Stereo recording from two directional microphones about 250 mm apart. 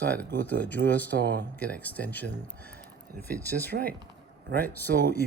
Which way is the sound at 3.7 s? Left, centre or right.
Right.